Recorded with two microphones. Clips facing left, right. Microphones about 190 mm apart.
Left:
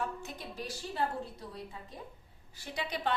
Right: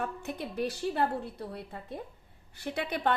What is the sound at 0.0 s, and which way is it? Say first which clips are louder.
A woman's voice: right 4 dB; 60° right (ahead or behind).